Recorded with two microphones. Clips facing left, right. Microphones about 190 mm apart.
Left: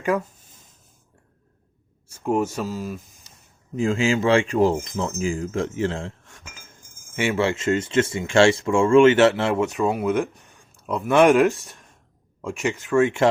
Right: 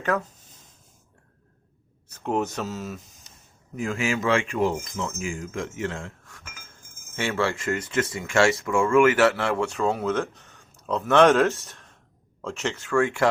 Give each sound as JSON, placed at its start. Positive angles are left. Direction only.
{"t": 2.0, "sound": "speech", "side_deg": 10}
{"t": 3.8, "sound": "speech", "side_deg": 25}
{"t": 4.8, "sound": "cutlery", "side_deg": 35}
{"t": 7.2, "sound": "speech", "side_deg": 15}